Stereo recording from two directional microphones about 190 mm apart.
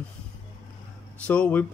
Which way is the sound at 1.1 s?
5° left (ahead or behind).